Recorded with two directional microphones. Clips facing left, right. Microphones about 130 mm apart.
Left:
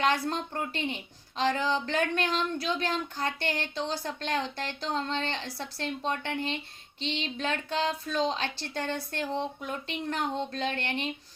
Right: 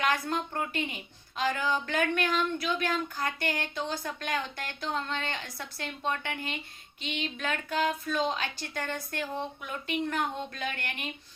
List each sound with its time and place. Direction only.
0.0 s speech: 30° left (ahead or behind)